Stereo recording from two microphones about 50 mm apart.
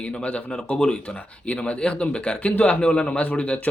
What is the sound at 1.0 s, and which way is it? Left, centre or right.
Speech, left.